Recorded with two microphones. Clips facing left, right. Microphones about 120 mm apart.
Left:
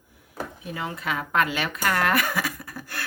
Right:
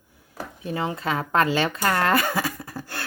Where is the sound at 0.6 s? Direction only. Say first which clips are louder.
Right 7 dB; 30° right (ahead or behind).